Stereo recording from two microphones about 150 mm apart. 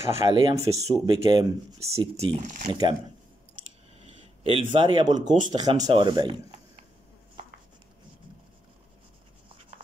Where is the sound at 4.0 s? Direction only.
40° right (ahead or behind).